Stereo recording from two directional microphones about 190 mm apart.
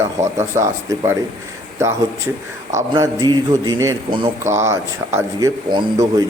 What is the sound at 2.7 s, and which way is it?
A man's voice, 20° right (ahead or behind).